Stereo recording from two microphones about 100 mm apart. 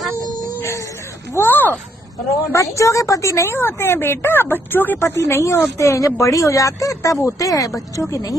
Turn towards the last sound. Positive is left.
turn(degrees=35)  # may be behind; listen again after turning